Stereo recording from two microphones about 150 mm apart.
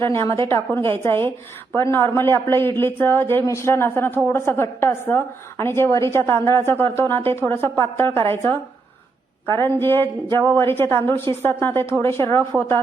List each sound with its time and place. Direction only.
0.0 s a woman's voice: 15° left (ahead or behind)